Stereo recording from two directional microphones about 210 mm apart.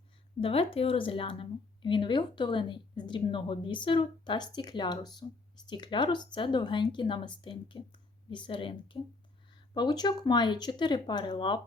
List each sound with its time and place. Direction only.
0.3 s a woman's voice: 25° left (ahead or behind)